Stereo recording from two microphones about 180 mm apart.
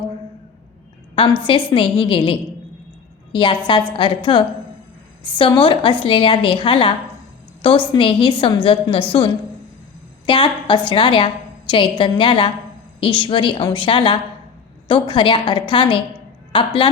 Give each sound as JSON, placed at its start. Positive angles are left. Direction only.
{"t": 1.4, "sound": "a woman's voice", "side_deg": 30}